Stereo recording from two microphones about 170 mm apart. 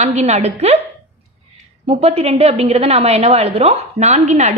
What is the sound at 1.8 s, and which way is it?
A woman's voice, 35° right (ahead or behind).